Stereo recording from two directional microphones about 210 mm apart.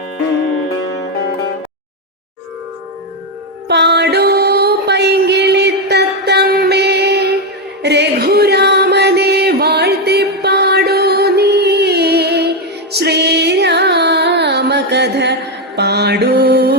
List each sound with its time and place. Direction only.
3.7 s music: 55° right (ahead or behind)
13.0 s carnatic music: 50° right (ahead or behind)